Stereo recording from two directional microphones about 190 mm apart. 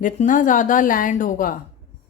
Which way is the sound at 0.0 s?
40° left (ahead or behind).